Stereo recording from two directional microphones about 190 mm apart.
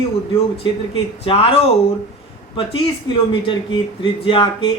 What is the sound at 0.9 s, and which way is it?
Speech, 30° left (ahead or behind).